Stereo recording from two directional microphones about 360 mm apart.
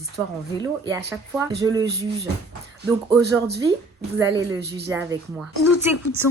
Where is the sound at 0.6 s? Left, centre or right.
Centre.